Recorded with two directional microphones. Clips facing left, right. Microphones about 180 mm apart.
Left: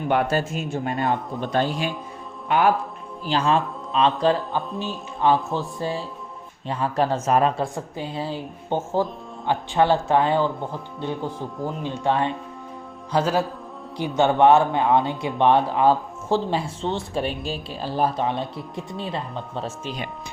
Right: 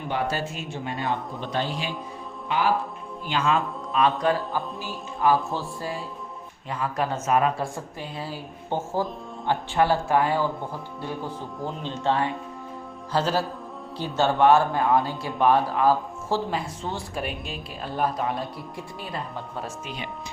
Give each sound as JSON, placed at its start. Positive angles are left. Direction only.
{"t": 0.1, "sound": "a man's voice", "side_deg": 55}
{"t": 3.2, "sound": "speech", "side_deg": 35}